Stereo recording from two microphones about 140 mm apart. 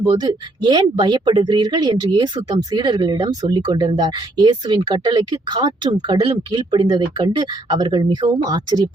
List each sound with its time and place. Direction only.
0.1 s speech: 30° right (ahead or behind)